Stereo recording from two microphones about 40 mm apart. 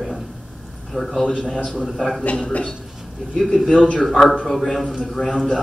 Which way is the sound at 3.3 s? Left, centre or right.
Centre.